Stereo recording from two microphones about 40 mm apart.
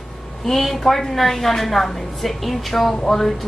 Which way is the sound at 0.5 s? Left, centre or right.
Centre.